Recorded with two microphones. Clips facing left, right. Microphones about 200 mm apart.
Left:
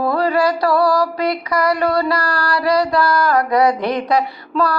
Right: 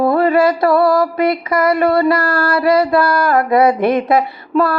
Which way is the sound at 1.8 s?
25° right (ahead or behind).